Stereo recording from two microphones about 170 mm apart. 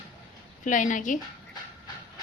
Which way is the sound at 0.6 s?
50° left (ahead or behind).